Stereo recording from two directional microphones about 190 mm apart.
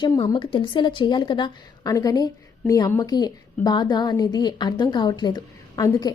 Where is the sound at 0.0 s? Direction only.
20° left (ahead or behind).